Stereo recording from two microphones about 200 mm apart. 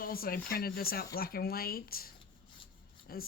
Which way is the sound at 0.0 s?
45° left (ahead or behind).